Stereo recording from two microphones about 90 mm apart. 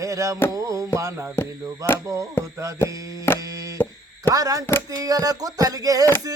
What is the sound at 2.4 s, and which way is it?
Mantra, 25° left (ahead or behind).